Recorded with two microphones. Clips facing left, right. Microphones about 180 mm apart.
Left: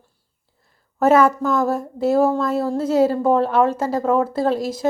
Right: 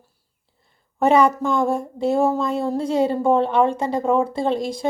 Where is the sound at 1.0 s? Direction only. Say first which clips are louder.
Left 1 dB; 5° left (ahead or behind).